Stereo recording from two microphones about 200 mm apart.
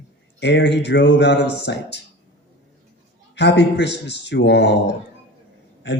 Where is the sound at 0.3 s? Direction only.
60° left (ahead or behind).